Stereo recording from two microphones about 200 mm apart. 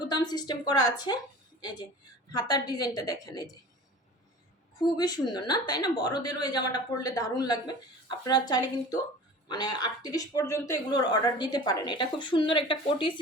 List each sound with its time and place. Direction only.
0.0 s speech: 20° left (ahead or behind)
2.3 s speech: 20° left (ahead or behind)
4.8 s speech: 20° left (ahead or behind)